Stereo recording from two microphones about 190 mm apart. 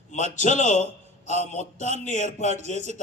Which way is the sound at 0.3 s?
40° left (ahead or behind).